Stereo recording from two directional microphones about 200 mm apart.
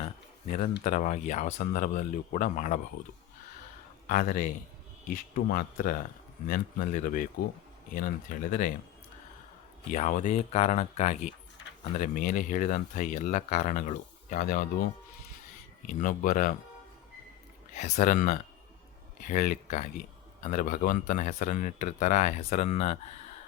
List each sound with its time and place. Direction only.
0.9 s speech: 35° left (ahead or behind)
4.0 s speech: 40° left (ahead or behind)
9.9 s speech: 40° left (ahead or behind)
15.9 s speech: 40° left (ahead or behind)
17.7 s speech: 35° left (ahead or behind)